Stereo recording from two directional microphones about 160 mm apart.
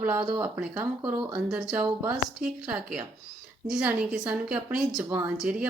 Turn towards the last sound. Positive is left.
turn(degrees=-5)  # may be behind; listen again after turning